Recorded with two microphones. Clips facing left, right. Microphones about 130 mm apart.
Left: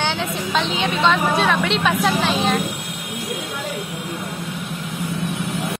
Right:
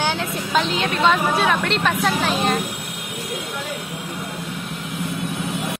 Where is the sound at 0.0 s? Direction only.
5° right (ahead or behind).